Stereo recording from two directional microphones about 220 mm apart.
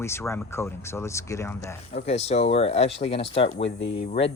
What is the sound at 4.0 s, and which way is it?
Speech, 25° left (ahead or behind).